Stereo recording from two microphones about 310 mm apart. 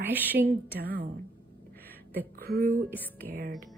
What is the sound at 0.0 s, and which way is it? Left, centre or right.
Speech, centre.